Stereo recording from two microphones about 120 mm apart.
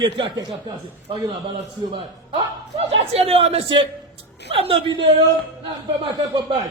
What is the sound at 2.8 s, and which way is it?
Speech, 55° right (ahead or behind).